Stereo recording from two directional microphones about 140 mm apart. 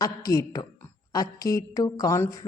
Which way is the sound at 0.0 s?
25° left (ahead or behind).